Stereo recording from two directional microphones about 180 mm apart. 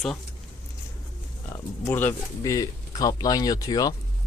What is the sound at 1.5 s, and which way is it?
Speech, 15° left (ahead or behind).